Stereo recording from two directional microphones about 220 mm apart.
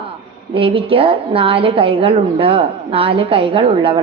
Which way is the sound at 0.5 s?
25° right (ahead or behind).